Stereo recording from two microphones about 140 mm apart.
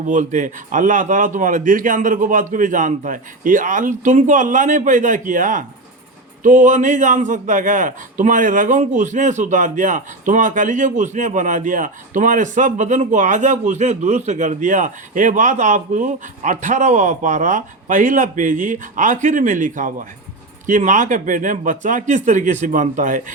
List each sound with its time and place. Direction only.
0.0 s a man's voice: 60° right (ahead or behind)